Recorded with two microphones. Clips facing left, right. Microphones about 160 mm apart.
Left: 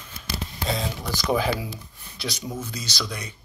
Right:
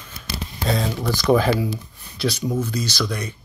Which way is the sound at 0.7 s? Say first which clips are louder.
Right 6 dB; 55° right (ahead or behind).